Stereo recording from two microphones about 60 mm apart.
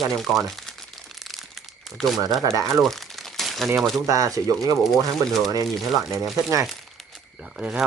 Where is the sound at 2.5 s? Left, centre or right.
Right.